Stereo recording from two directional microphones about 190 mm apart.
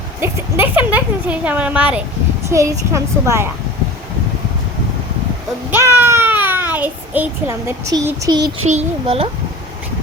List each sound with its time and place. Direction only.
0.2 s speech: 10° right (ahead or behind)
6.0 s a sound: 10° right (ahead or behind)
8.6 s speech: 35° right (ahead or behind)